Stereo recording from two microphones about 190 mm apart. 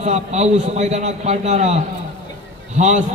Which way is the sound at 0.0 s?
35° right (ahead or behind).